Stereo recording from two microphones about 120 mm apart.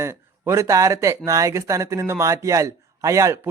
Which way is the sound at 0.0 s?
20° right (ahead or behind).